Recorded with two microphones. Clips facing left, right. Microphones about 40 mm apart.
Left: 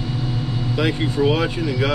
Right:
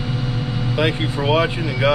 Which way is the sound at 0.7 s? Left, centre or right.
Centre.